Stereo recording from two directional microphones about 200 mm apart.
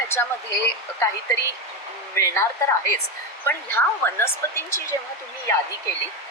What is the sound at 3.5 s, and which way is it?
Speech, 10° left (ahead or behind).